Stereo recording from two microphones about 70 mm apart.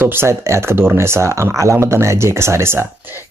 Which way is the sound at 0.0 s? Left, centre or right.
Right.